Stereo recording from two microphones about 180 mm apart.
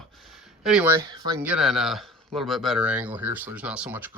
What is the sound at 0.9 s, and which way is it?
Speech, 20° right (ahead or behind).